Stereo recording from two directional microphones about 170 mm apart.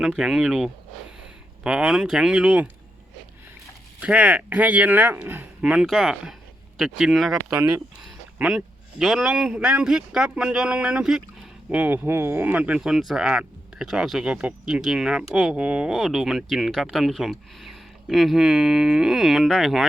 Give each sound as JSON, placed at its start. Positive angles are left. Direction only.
{"t": 0.0, "sound": "speech", "side_deg": -5}
{"t": 4.0, "sound": "speech", "side_deg": -10}
{"t": 7.3, "sound": "speech", "side_deg": -20}
{"t": 8.4, "sound": "speech", "side_deg": -5}